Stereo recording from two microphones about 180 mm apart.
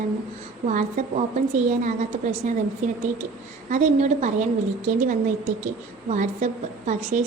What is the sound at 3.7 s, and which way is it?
Speech, 40° right (ahead or behind).